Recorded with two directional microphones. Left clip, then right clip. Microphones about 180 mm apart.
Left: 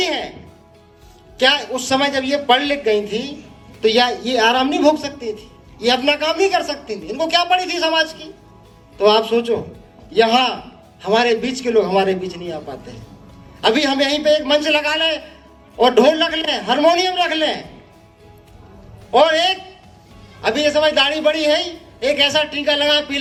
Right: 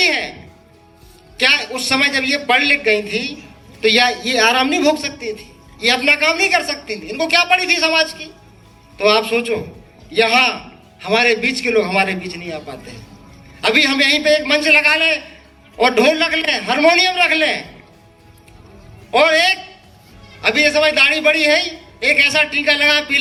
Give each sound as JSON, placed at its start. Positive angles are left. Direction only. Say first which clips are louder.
{"t": 0.0, "sound": "music", "louder": "right 5 dB", "side_deg": 45}
{"t": 1.4, "sound": "a woman's voice", "louder": "right 1 dB", "side_deg": 45}
{"t": 19.1, "sound": "a woman's voice", "louder": "right 1 dB", "side_deg": 45}